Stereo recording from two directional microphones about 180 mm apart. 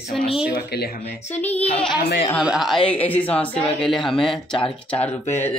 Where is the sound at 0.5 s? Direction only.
60° left (ahead or behind).